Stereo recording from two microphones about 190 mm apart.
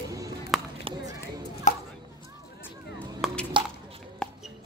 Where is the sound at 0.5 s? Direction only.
Centre (ahead or behind).